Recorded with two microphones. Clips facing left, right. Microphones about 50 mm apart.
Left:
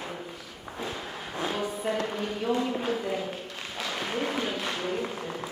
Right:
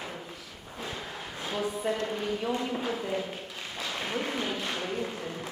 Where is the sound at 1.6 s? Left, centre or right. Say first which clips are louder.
Left 1 dB; centre.